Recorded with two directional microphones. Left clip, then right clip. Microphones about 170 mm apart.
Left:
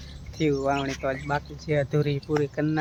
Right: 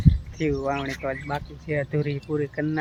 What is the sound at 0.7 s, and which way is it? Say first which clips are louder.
Speech: left 1 dB; 5° left (ahead or behind).